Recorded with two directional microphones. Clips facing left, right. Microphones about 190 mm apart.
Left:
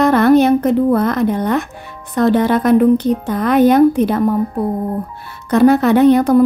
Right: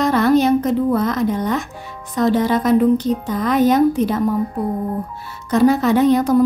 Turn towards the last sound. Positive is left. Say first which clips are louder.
# left 4 dB
turn(degrees=60)  # may be behind; listen again after turning